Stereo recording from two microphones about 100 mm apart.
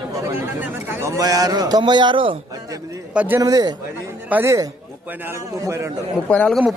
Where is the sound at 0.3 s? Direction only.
25° right (ahead or behind); by 2.4 s 60° right (ahead or behind).